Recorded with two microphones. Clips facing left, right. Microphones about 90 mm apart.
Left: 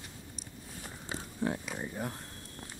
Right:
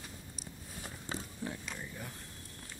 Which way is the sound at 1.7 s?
45° left (ahead or behind).